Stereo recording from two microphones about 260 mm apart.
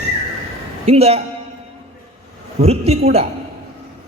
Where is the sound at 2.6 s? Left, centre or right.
Right.